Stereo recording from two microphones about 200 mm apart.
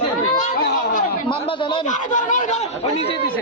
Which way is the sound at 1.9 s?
40° left (ahead or behind).